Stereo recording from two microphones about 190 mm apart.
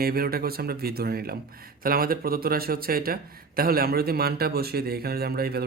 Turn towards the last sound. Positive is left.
turn(degrees=-55)  # may be behind; listen again after turning